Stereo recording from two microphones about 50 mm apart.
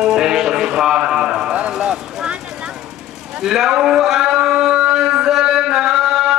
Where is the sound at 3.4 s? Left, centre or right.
Centre.